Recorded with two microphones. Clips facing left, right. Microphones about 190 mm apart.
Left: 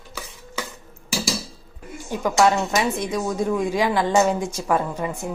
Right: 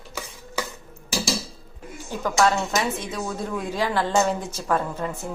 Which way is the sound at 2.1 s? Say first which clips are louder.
Left 3 dB; 15° left (ahead or behind).